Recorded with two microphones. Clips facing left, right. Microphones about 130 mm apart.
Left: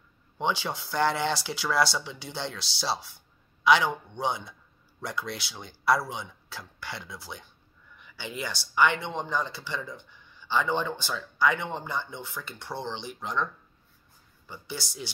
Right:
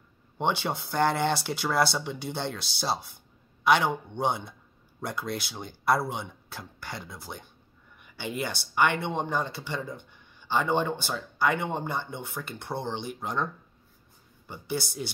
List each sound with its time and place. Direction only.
0.4 s a man's voice: 55° right (ahead or behind)
14.5 s speech: 55° right (ahead or behind)